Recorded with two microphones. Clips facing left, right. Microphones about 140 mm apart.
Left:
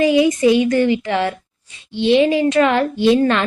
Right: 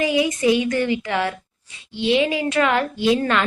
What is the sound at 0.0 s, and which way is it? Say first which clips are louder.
A woman's voice: left 6 dB; 30° left (ahead or behind).